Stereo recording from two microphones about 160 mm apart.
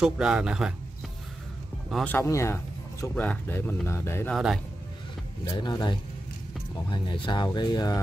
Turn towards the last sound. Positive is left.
turn(degrees=25)  # may be behind; listen again after turning